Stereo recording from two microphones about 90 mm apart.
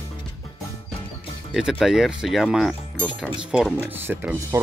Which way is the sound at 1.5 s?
5° right (ahead or behind).